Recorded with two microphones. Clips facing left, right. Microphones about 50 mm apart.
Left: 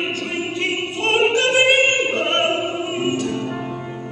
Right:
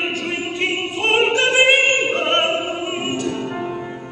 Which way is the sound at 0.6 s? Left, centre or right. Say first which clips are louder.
Right 2 dB; right.